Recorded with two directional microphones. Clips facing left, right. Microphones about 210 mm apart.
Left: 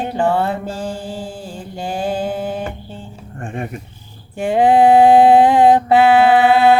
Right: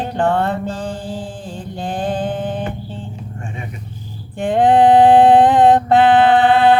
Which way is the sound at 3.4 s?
50° left (ahead or behind).